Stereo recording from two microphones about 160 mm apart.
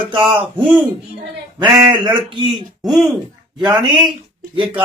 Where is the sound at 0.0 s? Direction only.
30° right (ahead or behind).